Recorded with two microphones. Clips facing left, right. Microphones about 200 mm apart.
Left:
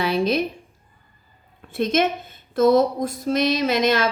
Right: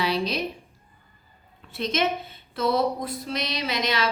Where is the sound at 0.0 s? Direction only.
50° left (ahead or behind).